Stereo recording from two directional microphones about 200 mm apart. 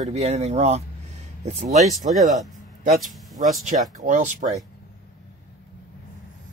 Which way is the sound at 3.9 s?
40° right (ahead or behind).